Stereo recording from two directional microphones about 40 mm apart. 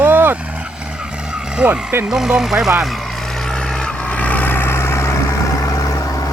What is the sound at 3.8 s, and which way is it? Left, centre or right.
Vehicle, left.